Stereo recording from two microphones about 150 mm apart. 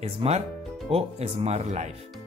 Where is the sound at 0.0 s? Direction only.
40° right (ahead or behind).